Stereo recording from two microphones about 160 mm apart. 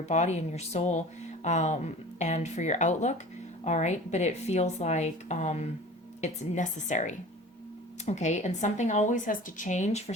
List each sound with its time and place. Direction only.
0.0 s speech: 45° left (ahead or behind)